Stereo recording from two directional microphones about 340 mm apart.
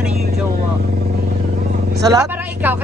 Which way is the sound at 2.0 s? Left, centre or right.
Centre.